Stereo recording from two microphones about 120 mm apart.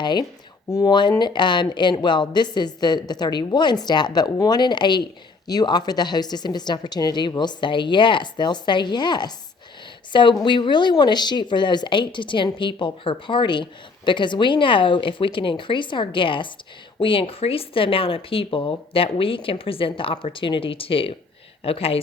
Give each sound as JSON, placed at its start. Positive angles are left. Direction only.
{"t": 0.0, "sound": "a woman's voice", "side_deg": 40}